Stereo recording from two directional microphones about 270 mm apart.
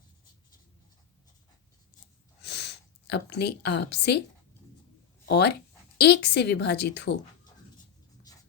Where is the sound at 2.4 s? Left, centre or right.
Left.